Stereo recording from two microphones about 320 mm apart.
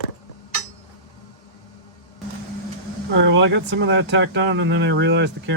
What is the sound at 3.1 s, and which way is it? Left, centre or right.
Speech, right.